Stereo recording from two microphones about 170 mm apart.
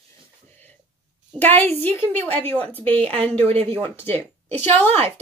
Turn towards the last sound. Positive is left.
turn(degrees=10)  # may be behind; listen again after turning